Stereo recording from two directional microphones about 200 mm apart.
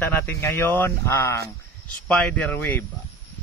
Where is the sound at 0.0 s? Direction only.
10° left (ahead or behind).